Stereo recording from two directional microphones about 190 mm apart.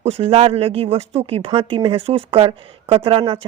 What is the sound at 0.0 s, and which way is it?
Speech, 30° right (ahead or behind).